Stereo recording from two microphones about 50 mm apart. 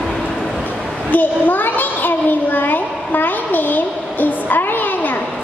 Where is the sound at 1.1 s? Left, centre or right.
Left.